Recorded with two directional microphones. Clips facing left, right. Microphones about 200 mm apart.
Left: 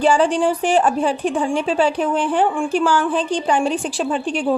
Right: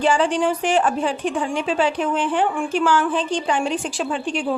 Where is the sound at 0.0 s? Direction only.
35° left (ahead or behind).